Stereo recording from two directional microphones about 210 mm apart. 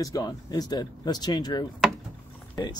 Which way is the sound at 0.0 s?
15° left (ahead or behind).